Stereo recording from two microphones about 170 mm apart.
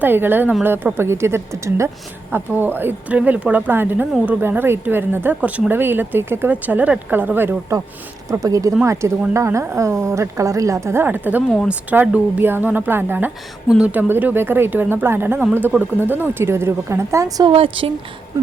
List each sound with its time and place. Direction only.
0.0 s a woman's voice: 10° right (ahead or behind)
17.5 s speech: 30° right (ahead or behind)